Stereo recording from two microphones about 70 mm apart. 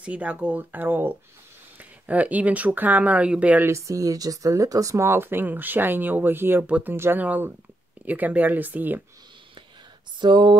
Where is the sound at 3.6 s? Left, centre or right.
Right.